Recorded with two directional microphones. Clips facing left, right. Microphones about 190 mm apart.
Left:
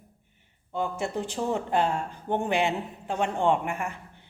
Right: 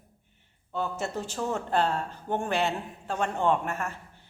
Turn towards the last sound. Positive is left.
turn(degrees=15)  # may be behind; listen again after turning